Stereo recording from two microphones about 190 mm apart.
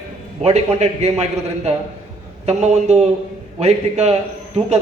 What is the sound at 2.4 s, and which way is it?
A man's voice, 35° right (ahead or behind).